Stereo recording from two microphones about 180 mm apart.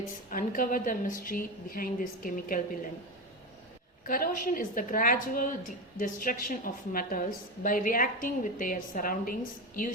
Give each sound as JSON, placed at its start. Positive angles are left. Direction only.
{"t": 0.3, "sound": "a woman's voice", "side_deg": 50}
{"t": 4.0, "sound": "a woman's voice", "side_deg": 50}